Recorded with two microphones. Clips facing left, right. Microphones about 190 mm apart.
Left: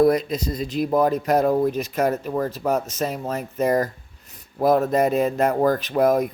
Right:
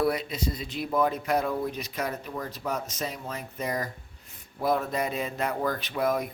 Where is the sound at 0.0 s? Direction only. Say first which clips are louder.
Left 9 dB; 45° left (ahead or behind).